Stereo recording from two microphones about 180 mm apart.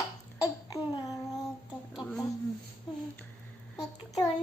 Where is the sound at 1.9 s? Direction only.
Centre (ahead or behind).